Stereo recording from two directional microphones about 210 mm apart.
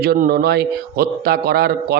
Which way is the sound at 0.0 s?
45° right (ahead or behind).